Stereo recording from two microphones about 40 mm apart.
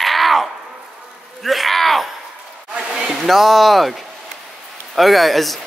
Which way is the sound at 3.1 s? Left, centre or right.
Centre.